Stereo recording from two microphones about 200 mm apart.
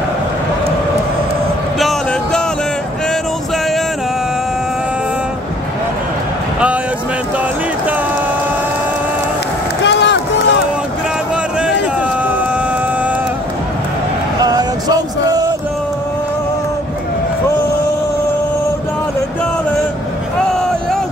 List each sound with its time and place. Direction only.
1.8 s music: centre (ahead or behind)
9.8 s run: 60° left (ahead or behind)
14.4 s music: 20° right (ahead or behind)
20.3 s a sound: centre (ahead or behind)